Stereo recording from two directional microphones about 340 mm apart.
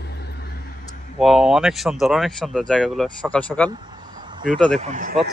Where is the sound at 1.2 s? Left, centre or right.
Centre.